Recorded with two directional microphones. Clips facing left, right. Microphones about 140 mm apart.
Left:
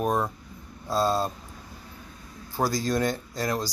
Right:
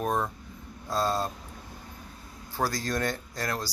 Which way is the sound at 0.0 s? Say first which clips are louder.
Left 3 dB; 15° left (ahead or behind).